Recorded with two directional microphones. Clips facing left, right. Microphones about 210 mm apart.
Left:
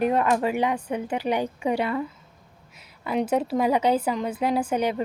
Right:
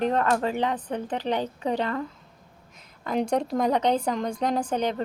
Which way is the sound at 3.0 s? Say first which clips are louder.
Left 1 dB; 5° left (ahead or behind).